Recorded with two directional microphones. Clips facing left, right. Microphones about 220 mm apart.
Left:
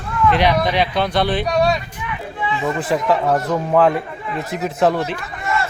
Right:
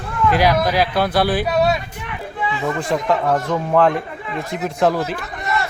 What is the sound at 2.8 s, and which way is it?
Speech, 5° left (ahead or behind).